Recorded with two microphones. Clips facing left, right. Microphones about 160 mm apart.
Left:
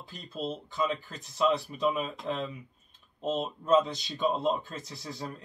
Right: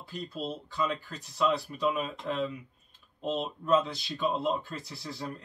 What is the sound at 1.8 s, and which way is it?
Speech, 20° left (ahead or behind).